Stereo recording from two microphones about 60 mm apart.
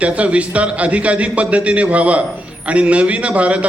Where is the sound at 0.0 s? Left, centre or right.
Right.